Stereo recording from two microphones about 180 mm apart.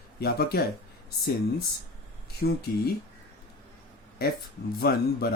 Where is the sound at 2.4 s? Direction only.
60° left (ahead or behind).